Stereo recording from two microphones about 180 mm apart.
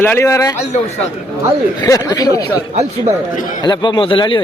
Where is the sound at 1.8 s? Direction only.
20° left (ahead or behind).